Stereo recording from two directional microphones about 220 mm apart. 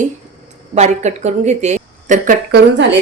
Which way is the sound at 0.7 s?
30° right (ahead or behind).